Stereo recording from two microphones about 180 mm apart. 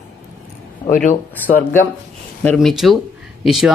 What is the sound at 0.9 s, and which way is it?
Speech, 45° left (ahead or behind).